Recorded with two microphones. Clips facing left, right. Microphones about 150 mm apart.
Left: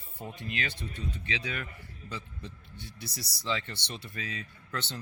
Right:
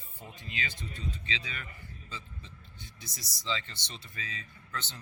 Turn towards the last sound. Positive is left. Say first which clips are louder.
# left 4 dB
turn(degrees=65)  # may be behind; listen again after turning